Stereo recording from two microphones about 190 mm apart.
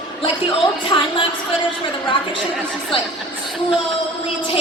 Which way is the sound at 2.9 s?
30° left (ahead or behind).